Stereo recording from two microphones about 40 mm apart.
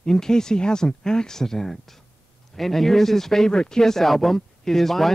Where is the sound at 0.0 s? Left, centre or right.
Centre.